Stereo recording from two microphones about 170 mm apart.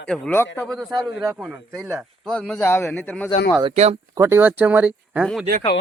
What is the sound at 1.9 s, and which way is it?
Speech, 5° left (ahead or behind).